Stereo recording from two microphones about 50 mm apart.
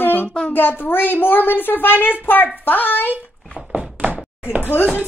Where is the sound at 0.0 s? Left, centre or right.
Left.